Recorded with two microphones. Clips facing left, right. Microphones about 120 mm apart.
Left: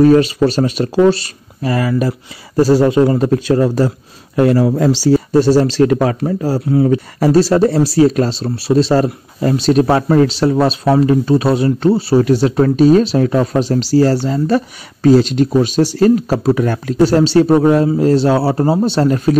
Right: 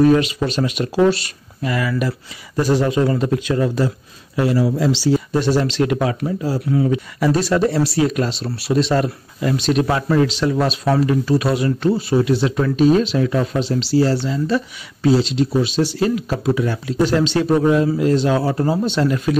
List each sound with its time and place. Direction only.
0.1 s speech: 35° left (ahead or behind)
4.4 s speech: 55° left (ahead or behind)
5.0 s speech: 40° left (ahead or behind)
16.6 s speech: 55° left (ahead or behind)
17.0 s speech: 35° left (ahead or behind)